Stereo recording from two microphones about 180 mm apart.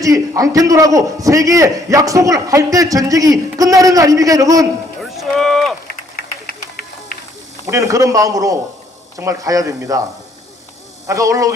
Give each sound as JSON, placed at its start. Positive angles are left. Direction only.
{"t": 0.0, "sound": "a man's voice", "side_deg": -20}
{"t": 5.0, "sound": "run", "side_deg": 0}
{"t": 5.9, "sound": "vehicle", "side_deg": 55}
{"t": 7.7, "sound": "a man's voice", "side_deg": -15}
{"t": 11.0, "sound": "a man's voice", "side_deg": -15}